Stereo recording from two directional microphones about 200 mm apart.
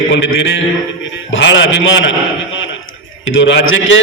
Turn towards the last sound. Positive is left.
turn(degrees=70)  # may be behind; listen again after turning